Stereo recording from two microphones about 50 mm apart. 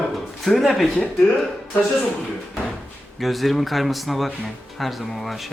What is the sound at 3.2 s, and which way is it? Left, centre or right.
Speech, centre.